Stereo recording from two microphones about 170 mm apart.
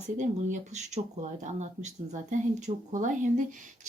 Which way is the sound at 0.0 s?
45° right (ahead or behind).